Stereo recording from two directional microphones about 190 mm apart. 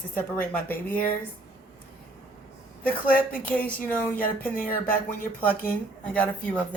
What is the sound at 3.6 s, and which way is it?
Speech, 10° left (ahead or behind).